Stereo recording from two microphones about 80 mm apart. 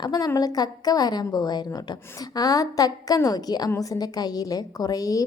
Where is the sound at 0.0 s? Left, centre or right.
Left.